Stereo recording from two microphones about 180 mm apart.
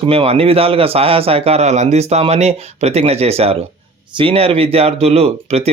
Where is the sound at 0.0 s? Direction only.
30° right (ahead or behind).